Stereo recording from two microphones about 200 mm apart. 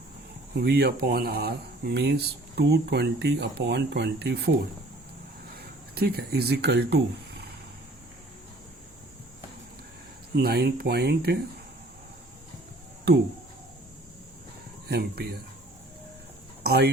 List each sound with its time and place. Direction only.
0.5 s speech: 55° right (ahead or behind)
5.5 s speech: 50° right (ahead or behind)
10.3 s speech: 50° right (ahead or behind)
14.8 s speech: 50° right (ahead or behind)
16.6 s speech: 55° right (ahead or behind)